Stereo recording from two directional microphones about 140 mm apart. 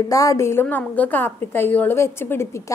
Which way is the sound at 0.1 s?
25° left (ahead or behind).